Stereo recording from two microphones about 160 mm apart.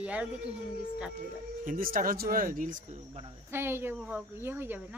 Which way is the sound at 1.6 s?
60° right (ahead or behind).